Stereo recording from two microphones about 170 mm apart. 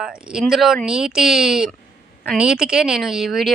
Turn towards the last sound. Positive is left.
turn(degrees=0)  # may be behind; listen again after turning